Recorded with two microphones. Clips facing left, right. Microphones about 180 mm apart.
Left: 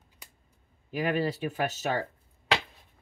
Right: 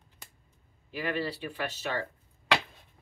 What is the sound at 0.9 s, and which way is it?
Speech, 45° left (ahead or behind).